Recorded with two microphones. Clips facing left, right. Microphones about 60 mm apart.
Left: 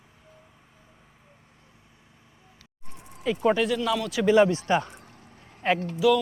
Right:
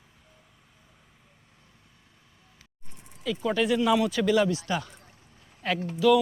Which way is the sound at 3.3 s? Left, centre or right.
Left.